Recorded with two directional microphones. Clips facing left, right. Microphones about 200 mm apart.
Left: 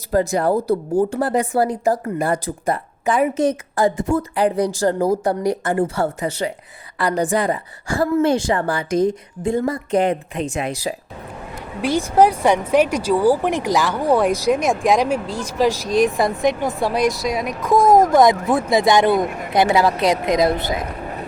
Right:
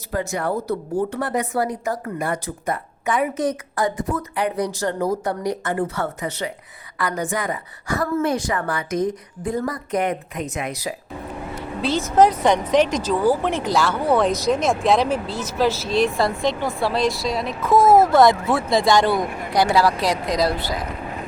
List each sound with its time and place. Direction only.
0.1 s a woman's voice: 35° left (ahead or behind)
11.8 s a woman's voice: 15° left (ahead or behind)